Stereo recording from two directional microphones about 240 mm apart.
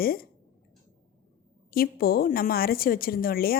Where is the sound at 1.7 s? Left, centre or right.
Left.